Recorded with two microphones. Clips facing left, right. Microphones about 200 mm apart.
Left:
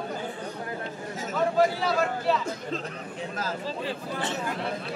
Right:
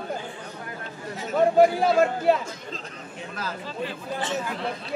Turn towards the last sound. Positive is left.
turn(degrees=40)  # may be behind; listen again after turning